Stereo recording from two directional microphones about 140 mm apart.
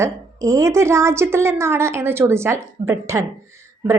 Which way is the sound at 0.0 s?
20° right (ahead or behind).